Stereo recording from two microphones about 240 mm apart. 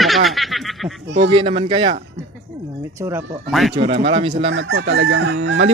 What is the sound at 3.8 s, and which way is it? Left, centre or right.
Speech, right.